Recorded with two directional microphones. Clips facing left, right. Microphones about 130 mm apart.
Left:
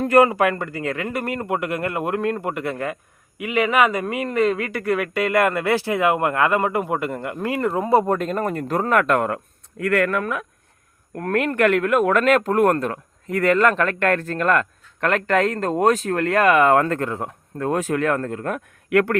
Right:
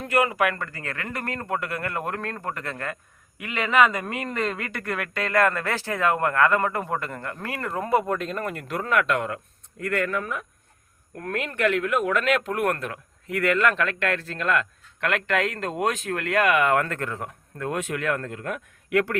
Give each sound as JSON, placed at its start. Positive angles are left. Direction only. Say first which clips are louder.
{"t": 0.0, "sound": "speech", "louder": "left 8 dB", "side_deg": 40}
{"t": 0.3, "sound": "speech", "louder": "left 4 dB", "side_deg": 30}
{"t": 7.9, "sound": "speech", "louder": "left 4 dB", "side_deg": 40}
{"t": 9.8, "sound": "speech", "louder": "left 6 dB", "side_deg": 70}
{"t": 11.2, "sound": "speech", "louder": "left 6 dB", "side_deg": 55}
{"t": 18.9, "sound": "speech", "louder": "left 5 dB", "side_deg": 55}